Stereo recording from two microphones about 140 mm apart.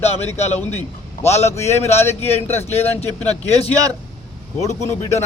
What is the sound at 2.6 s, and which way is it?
Speech, 50° left (ahead or behind).